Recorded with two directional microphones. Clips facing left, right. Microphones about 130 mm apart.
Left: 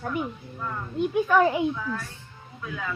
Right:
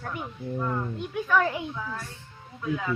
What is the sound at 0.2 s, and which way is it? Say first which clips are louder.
Speech: even; 20° right (ahead or behind).